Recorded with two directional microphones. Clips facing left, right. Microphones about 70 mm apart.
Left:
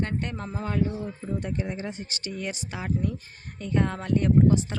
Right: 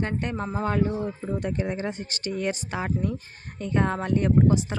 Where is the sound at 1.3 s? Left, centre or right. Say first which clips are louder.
Right 2 dB; right.